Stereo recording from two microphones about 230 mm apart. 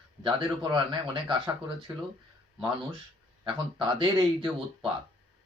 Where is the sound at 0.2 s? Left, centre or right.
Right.